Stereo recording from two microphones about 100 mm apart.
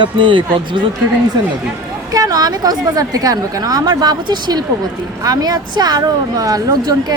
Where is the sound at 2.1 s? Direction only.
40° right (ahead or behind).